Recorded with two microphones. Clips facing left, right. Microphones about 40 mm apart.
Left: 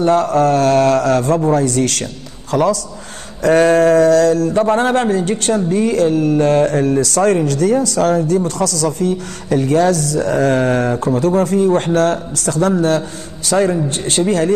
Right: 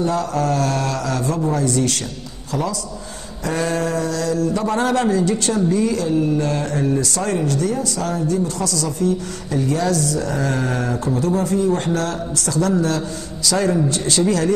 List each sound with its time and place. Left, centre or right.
0.0 s a man's voice: left